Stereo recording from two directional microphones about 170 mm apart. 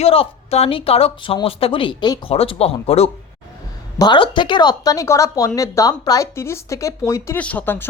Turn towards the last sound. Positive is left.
turn(degrees=10)  # may be behind; listen again after turning